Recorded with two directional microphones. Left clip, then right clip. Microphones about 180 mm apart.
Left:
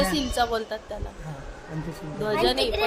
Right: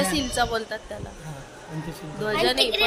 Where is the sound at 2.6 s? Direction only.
55° left (ahead or behind).